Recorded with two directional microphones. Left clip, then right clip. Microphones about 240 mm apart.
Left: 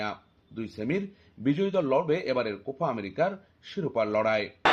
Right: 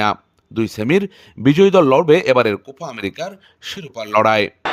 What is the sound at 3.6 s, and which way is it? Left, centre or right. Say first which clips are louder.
Speech: right 1 dB; right.